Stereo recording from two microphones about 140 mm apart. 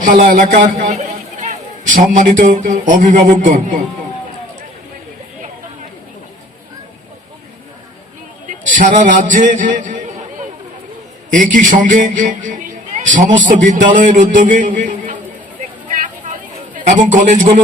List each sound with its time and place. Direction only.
0.0 s a man's voice: 70° right (ahead or behind)
0.9 s a man's voice: 60° right (ahead or behind)
8.4 s a man's voice: 65° right (ahead or behind)
11.3 s a man's voice: 70° right (ahead or behind)
16.7 s a man's voice: 60° right (ahead or behind)